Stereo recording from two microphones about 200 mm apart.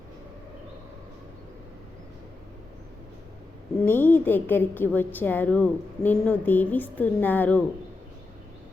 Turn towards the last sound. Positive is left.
turn(degrees=10)  # may be behind; listen again after turning